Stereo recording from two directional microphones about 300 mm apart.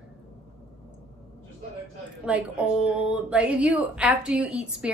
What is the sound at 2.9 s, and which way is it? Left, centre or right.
A woman's voice, centre.